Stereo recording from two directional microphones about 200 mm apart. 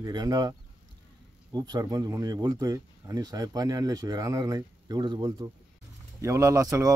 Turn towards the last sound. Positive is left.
turn(degrees=-15)  # may be behind; listen again after turning